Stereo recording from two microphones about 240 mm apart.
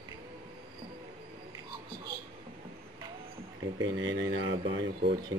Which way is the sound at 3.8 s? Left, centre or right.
Right.